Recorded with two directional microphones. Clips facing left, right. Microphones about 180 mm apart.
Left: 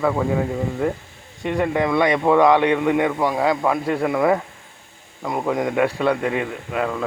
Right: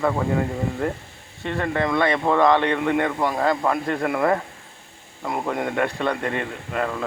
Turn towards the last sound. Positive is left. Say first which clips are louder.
# left 2 dB
turn(degrees=5)  # may be behind; listen again after turning